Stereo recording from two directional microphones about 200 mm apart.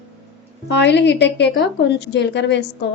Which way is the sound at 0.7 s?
60° left (ahead or behind).